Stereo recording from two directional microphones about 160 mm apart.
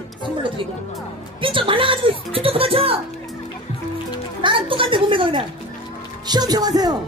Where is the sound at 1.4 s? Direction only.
30° right (ahead or behind).